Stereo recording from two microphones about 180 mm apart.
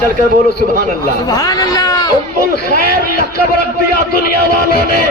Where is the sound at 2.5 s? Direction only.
60° left (ahead or behind).